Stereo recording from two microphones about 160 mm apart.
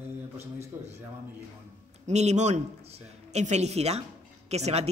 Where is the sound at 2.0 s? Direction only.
45° right (ahead or behind).